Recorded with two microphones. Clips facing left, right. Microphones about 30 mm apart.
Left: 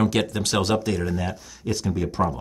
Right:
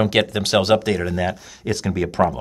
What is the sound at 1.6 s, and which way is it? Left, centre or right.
Speech, right.